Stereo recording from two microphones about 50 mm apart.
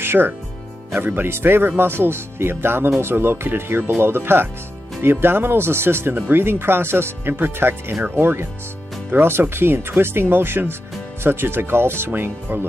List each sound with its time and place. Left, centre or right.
0.0 s music: right
0.9 s speech: right